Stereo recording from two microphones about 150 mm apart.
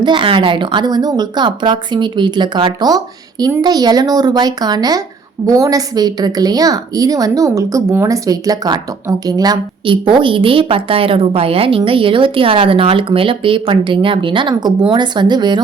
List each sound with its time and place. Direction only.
0.0 s a woman's voice: 35° right (ahead or behind)